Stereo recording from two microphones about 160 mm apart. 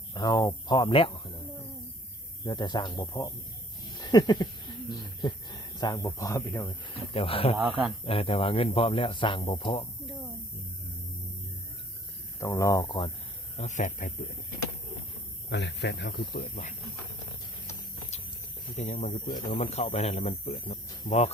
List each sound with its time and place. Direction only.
0.1 s speech: 25° left (ahead or behind)
2.4 s speech: 25° left (ahead or behind)
3.9 s a sound: 25° left (ahead or behind)
5.2 s speech: 25° left (ahead or behind)
7.5 s speech: 5° right (ahead or behind)
8.0 s speech: 35° left (ahead or behind)
12.4 s speech: 20° left (ahead or behind)
13.6 s speech: 50° left (ahead or behind)
15.4 s speech: 90° left; by 16.7 s 55° left (ahead or behind)
18.8 s speech: 50° left (ahead or behind)